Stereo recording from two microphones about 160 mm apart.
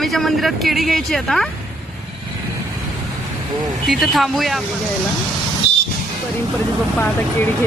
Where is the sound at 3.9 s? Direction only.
Centre (ahead or behind).